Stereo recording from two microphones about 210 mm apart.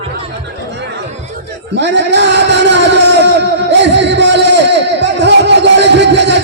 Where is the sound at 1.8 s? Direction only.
55° right (ahead or behind).